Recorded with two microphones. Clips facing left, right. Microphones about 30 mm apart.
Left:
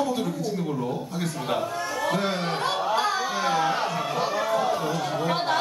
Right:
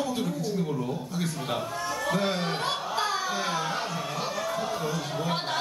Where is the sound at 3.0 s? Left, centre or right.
Centre.